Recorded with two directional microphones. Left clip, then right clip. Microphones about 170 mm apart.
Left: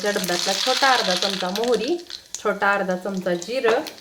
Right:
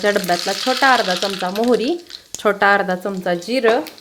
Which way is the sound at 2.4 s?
65° right (ahead or behind).